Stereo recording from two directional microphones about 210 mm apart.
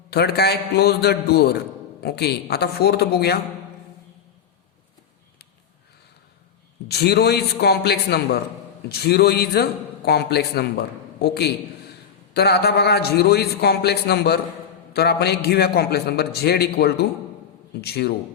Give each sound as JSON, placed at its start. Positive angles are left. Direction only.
{"t": 0.1, "sound": "a man's voice", "side_deg": 50}
{"t": 6.8, "sound": "a man's voice", "side_deg": 50}